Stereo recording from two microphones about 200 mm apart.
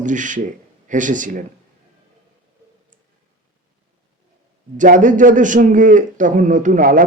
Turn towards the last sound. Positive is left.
turn(degrees=-40)  # may be behind; listen again after turning